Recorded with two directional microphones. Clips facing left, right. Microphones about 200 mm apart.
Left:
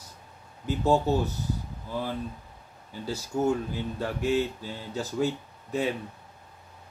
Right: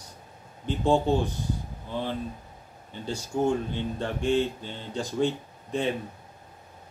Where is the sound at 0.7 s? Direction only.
5° left (ahead or behind).